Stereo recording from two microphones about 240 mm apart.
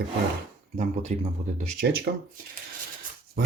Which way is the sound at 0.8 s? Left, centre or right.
Right.